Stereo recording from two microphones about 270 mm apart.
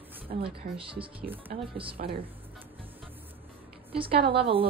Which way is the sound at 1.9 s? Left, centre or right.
Right.